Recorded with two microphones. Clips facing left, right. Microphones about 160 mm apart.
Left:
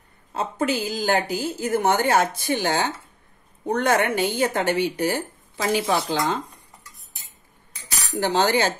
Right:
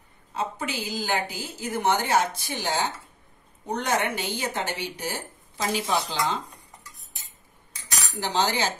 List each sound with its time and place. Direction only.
0.3 s a woman's voice: 50° left (ahead or behind)
8.1 s a woman's voice: 50° left (ahead or behind)